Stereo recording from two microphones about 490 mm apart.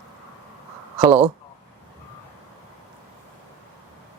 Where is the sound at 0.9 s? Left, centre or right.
Centre.